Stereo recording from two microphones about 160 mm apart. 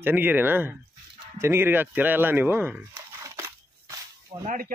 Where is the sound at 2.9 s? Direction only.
20° right (ahead or behind).